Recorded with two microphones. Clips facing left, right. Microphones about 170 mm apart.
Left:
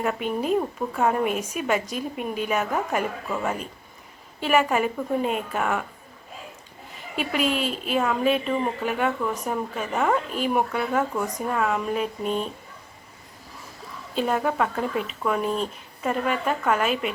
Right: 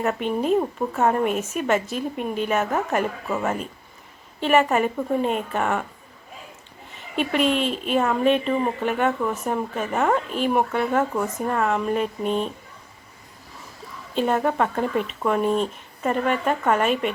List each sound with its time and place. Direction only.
0.1 s a woman's voice: 5° left (ahead or behind)
7.2 s speech: 5° left (ahead or behind)
14.2 s a woman's voice: 5° left (ahead or behind)